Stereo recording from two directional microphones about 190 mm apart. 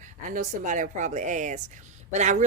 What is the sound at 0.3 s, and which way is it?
A woman's voice, 40° right (ahead or behind).